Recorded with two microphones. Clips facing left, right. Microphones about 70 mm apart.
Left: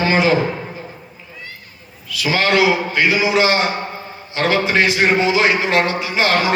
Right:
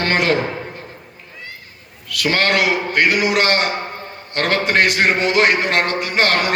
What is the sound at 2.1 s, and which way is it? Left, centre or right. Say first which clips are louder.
Speech: left 1 dB; right.